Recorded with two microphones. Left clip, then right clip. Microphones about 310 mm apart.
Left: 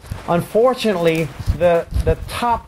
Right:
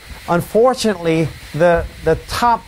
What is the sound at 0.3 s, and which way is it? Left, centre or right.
Speech, right.